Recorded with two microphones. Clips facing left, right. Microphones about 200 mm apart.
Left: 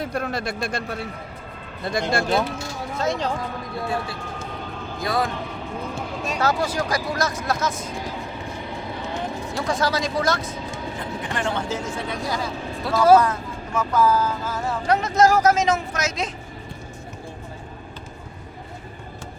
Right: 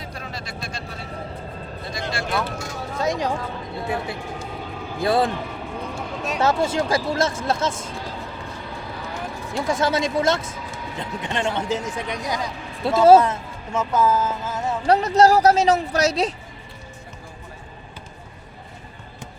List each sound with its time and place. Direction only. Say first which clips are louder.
0.0 s speech: left 9 dB; 55° left (ahead or behind)
3.0 s a man's voice: right 1 dB; 15° right (ahead or behind); by 5.3 s 30° right (ahead or behind)
5.4 s music: even; centre (ahead or behind)
6.4 s a man's voice: right 3 dB; 25° right (ahead or behind)
8.5 s vehicle: left 2 dB; 20° left (ahead or behind)
9.6 s a man's voice: right 2 dB; 25° right (ahead or behind)
14.8 s speech: right 3 dB; 35° right (ahead or behind)